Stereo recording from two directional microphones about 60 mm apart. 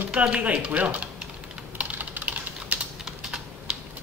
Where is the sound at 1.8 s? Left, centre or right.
Right.